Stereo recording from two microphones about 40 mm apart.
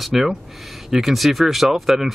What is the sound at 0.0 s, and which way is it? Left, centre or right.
Speech, centre.